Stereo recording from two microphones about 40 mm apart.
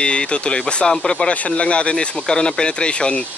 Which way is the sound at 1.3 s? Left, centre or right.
Left.